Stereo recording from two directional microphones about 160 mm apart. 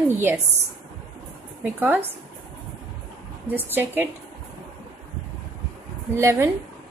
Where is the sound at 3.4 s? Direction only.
10° right (ahead or behind).